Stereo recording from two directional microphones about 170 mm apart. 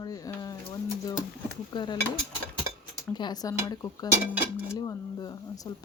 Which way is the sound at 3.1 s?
25° left (ahead or behind).